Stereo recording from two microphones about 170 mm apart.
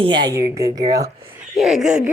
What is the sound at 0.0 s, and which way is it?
A woman's voice, 25° right (ahead or behind).